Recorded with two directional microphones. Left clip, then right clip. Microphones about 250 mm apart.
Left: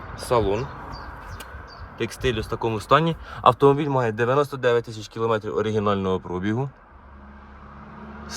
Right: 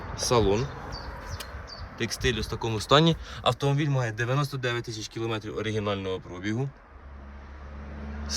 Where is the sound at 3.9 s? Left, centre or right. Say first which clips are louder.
Left 9 dB; centre.